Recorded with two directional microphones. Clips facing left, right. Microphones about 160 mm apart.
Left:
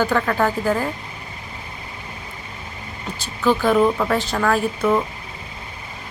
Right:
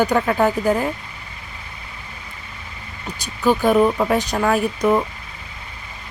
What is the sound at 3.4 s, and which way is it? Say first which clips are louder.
A woman's voice: right 1 dB; 15° right (ahead or behind).